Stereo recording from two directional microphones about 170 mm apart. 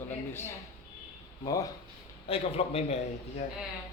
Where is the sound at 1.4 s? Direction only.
20° left (ahead or behind).